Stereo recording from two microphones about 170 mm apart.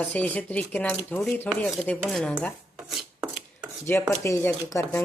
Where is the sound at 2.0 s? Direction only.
5° left (ahead or behind).